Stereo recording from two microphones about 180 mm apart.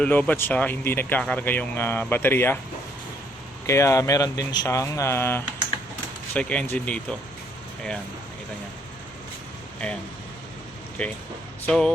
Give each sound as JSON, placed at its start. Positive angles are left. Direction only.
{"t": 0.0, "sound": "speech", "side_deg": 10}
{"t": 3.7, "sound": "speech", "side_deg": 15}
{"t": 11.0, "sound": "speech", "side_deg": 5}